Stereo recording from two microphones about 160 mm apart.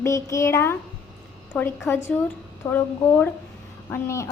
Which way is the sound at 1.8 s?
15° left (ahead or behind).